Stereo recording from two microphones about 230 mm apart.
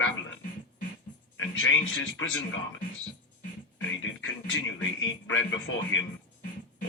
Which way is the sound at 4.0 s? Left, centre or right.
Left.